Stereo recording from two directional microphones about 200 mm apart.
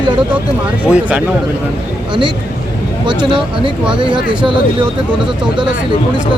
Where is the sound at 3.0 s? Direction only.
25° right (ahead or behind).